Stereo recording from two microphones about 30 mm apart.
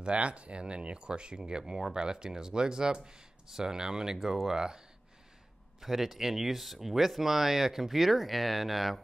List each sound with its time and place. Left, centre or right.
0.0 s speech: right
1.6 s speech: centre
2.0 s speech: right
5.8 s speech: centre